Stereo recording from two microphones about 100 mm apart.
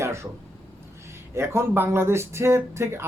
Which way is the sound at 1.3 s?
25° right (ahead or behind).